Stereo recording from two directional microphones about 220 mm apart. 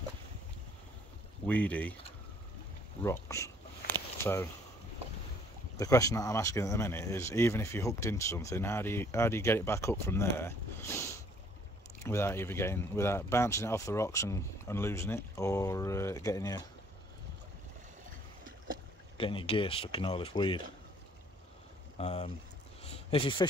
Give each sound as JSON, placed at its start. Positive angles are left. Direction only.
{"t": 1.5, "sound": "speech", "side_deg": 5}
{"t": 3.0, "sound": "a sound", "side_deg": 15}
{"t": 5.8, "sound": "speech", "side_deg": 15}
{"t": 19.1, "sound": "speech", "side_deg": 25}
{"t": 21.9, "sound": "speech", "side_deg": 30}